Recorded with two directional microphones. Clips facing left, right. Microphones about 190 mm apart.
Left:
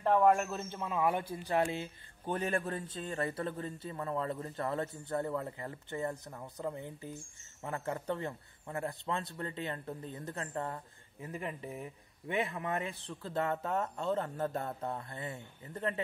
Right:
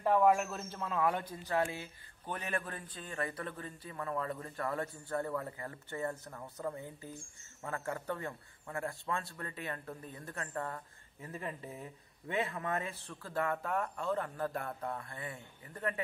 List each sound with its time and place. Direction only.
0.0 s speech: 5° right (ahead or behind)
0.8 s a man's voice: 10° left (ahead or behind)